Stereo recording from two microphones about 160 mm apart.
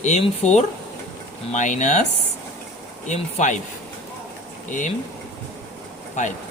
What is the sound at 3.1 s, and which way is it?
Speech, 50° left (ahead or behind).